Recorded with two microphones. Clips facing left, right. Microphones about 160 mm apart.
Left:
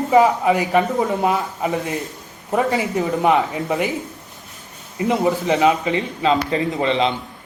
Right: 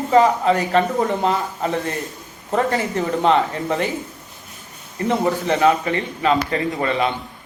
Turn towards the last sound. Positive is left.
turn(degrees=20)  # may be behind; listen again after turning